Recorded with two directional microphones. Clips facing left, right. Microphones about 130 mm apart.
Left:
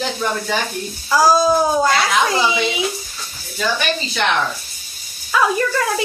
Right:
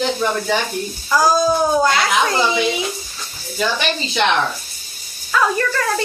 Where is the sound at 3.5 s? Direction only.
20° right (ahead or behind).